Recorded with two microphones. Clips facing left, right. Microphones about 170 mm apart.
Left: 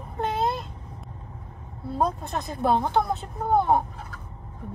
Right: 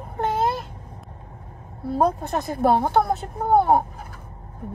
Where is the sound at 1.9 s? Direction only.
55° right (ahead or behind).